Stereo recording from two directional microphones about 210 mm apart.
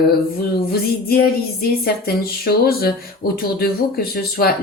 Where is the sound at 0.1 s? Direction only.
45° left (ahead or behind).